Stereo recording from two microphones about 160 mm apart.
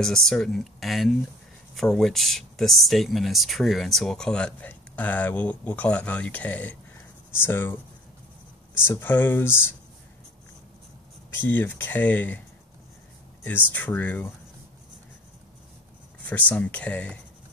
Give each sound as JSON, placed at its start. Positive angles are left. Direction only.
{"t": 0.0, "sound": "speech", "side_deg": 5}
{"t": 8.7, "sound": "speech", "side_deg": 15}
{"t": 11.4, "sound": "speech", "side_deg": 10}
{"t": 13.4, "sound": "speech", "side_deg": 10}
{"t": 16.3, "sound": "speech", "side_deg": 10}